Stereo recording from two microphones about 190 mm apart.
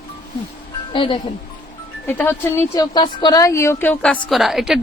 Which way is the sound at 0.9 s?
25° left (ahead or behind).